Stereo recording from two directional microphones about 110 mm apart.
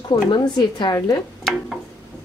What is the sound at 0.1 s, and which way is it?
A woman's voice, 45° left (ahead or behind).